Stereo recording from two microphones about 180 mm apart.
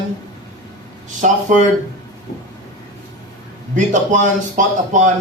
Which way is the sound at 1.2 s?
45° right (ahead or behind).